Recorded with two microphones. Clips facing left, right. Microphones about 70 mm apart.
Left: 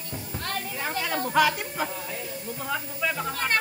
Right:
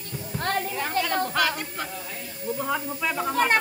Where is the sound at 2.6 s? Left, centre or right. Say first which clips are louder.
Right 1 dB; centre.